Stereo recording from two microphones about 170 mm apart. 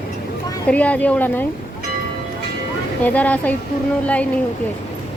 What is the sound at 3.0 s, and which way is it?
Speech, 10° left (ahead or behind).